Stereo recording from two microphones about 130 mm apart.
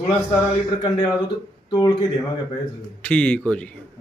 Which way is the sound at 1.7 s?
35° left (ahead or behind).